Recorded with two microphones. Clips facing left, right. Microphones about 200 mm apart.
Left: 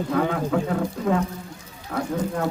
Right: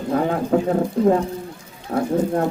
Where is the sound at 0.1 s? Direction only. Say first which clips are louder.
Right 5 dB; 35° right (ahead or behind).